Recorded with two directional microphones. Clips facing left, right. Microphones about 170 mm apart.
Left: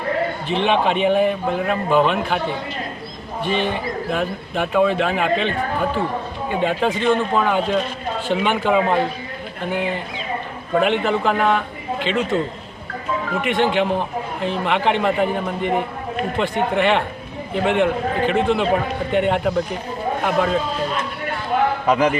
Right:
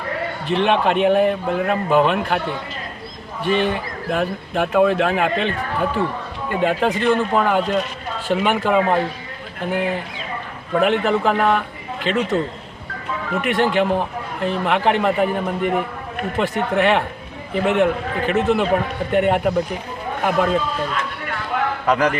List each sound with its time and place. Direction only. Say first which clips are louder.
0.4 s a man's voice: right 2 dB; centre (ahead or behind)
3.4 s a man's voice: right 2 dB; centre (ahead or behind)
6.5 s a man's voice: right 1 dB; centre (ahead or behind)
13.4 s a man's voice: right 1 dB; centre (ahead or behind)
21.9 s a man's voice: even; 20° left (ahead or behind)